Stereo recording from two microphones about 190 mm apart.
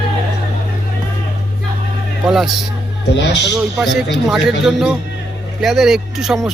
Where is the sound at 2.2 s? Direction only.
Centre (ahead or behind).